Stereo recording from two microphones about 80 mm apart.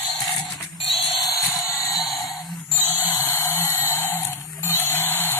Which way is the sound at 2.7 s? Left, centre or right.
Left.